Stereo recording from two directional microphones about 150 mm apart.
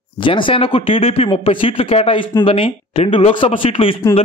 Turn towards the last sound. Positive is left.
turn(degrees=35)  # may be behind; listen again after turning